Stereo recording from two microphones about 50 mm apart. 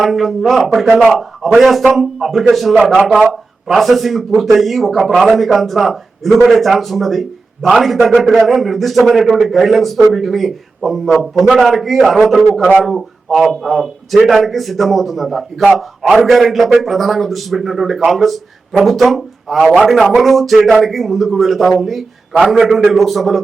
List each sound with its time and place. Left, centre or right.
0.0 s a man's voice: centre
15.6 s a man's voice: right
16.2 s a man's voice: centre